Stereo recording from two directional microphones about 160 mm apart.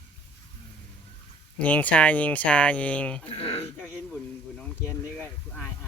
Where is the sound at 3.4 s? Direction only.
35° left (ahead or behind).